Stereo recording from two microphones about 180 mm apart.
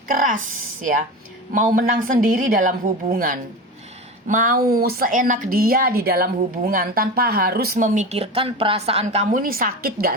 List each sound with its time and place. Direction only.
0.1 s speech: 50° right (ahead or behind)
1.5 s speech: 50° right (ahead or behind)
9.3 s speech: 50° right (ahead or behind)